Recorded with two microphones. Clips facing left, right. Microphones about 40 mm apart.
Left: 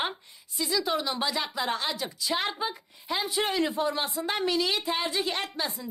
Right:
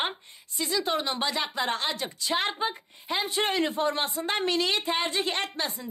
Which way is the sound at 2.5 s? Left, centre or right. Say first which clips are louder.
Right 2 dB; right.